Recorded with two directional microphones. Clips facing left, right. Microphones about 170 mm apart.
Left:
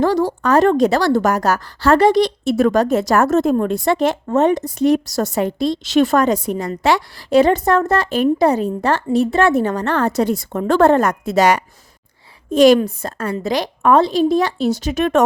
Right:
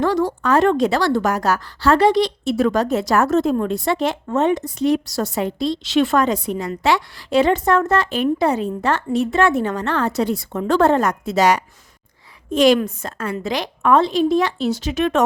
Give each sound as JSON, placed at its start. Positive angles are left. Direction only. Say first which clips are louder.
{"t": 0.0, "sound": "a woman's voice", "louder": "left 2 dB", "side_deg": 35}
{"t": 12.5, "sound": "a woman's voice", "louder": "left 4 dB", "side_deg": 40}